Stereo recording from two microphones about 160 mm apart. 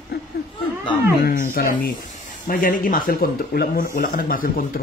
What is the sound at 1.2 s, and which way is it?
Speech, 60° left (ahead or behind).